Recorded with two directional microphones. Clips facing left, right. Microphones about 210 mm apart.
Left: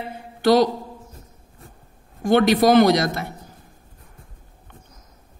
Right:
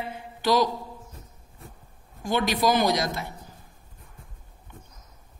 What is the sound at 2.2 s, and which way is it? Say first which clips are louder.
A man's voice: left 9 dB; 65° left (ahead or behind).